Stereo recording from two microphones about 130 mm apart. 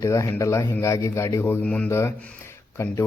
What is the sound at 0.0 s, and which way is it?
Speech, 25° left (ahead or behind).